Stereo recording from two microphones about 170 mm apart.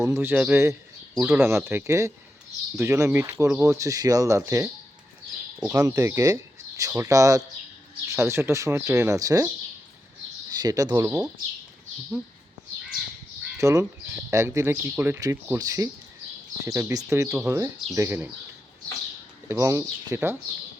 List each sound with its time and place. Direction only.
0.0 s speech: 15° right (ahead or behind)
5.5 s speech: 5° right (ahead or behind)
10.6 s speech: 25° right (ahead or behind)
13.6 s speech: 20° right (ahead or behind)
19.5 s speech: 15° right (ahead or behind)